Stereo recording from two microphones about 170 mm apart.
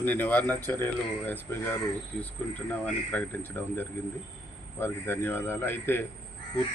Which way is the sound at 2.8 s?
10° left (ahead or behind).